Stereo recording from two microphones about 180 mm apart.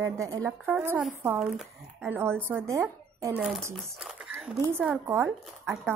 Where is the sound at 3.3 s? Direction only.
5° right (ahead or behind).